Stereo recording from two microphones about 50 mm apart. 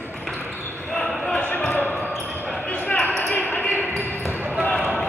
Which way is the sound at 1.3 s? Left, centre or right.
Left.